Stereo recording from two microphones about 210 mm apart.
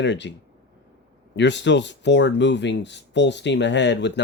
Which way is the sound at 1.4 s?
55° left (ahead or behind).